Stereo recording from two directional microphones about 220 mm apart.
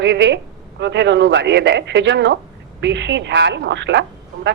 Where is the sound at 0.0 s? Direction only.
55° right (ahead or behind).